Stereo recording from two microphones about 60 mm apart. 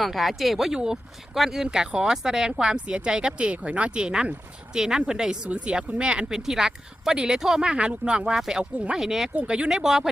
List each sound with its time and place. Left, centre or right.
0.0 s speech: centre
9.3 s speech: centre